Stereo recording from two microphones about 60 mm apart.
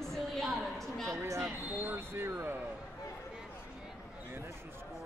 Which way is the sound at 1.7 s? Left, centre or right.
Right.